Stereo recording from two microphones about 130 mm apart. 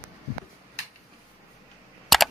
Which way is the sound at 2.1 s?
Centre (ahead or behind).